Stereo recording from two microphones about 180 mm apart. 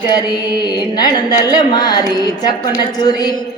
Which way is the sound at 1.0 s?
20° left (ahead or behind).